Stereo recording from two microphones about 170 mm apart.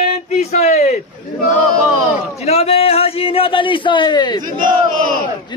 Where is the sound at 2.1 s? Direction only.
40° left (ahead or behind).